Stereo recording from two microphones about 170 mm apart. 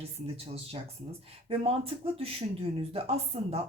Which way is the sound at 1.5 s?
35° right (ahead or behind).